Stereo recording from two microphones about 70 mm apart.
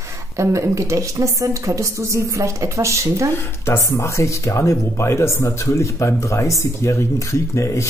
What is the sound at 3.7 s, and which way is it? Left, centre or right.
Speech, left.